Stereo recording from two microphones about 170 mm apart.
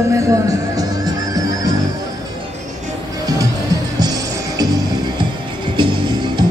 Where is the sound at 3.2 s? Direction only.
20° right (ahead or behind).